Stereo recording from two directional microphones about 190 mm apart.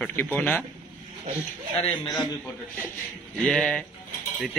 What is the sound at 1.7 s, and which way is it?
Speech, 30° left (ahead or behind).